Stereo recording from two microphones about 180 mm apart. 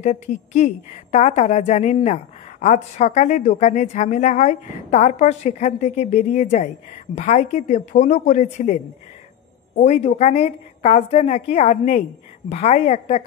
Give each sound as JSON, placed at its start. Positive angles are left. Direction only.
{"t": 0.0, "sound": "a woman's voice", "side_deg": 40}